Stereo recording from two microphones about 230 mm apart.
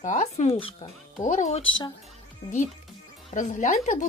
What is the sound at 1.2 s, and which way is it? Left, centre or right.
Speech, left.